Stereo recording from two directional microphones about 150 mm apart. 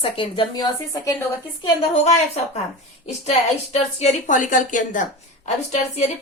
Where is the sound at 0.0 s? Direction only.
35° left (ahead or behind).